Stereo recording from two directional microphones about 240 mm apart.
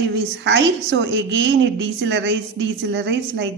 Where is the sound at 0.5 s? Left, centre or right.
Right.